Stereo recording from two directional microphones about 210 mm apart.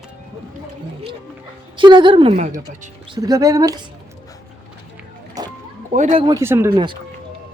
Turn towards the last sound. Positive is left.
turn(degrees=-25)  # may be behind; listen again after turning